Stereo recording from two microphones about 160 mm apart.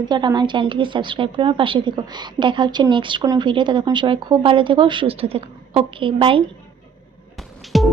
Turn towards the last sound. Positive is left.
turn(degrees=0)  # may be behind; listen again after turning